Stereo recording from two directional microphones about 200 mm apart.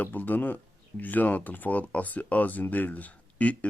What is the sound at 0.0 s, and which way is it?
Speech, 10° left (ahead or behind).